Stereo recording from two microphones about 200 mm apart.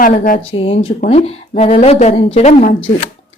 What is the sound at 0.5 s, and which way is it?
A woman's voice, 25° left (ahead or behind).